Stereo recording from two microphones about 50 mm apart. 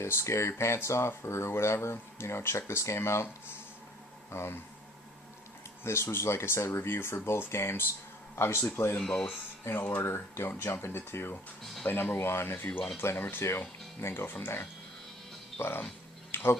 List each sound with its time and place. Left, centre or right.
0.0 s speech: left
5.8 s speech: left
9.0 s speech: centre
9.6 s speech: left
13.3 s speech: left
16.3 s a sound: left